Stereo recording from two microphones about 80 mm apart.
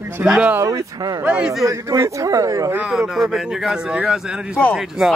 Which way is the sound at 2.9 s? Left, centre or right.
Centre.